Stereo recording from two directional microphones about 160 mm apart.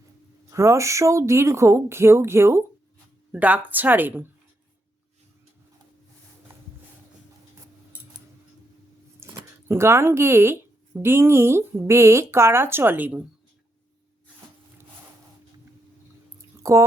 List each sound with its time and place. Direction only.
0.5 s a woman's voice: 20° right (ahead or behind)
9.2 s a sound: 15° right (ahead or behind)
9.6 s a woman's voice: 15° right (ahead or behind)
16.4 s drip: 20° right (ahead or behind)